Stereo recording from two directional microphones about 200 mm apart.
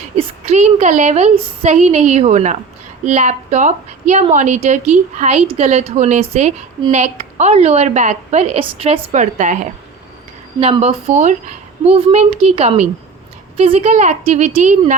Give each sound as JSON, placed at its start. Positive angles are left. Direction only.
{"t": 0.2, "sound": "a woman's voice", "side_deg": -35}
{"t": 10.6, "sound": "a woman's voice", "side_deg": -30}